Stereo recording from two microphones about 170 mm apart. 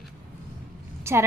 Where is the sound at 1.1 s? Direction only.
15° right (ahead or behind).